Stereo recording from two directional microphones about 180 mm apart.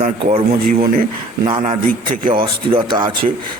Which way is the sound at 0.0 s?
45° right (ahead or behind).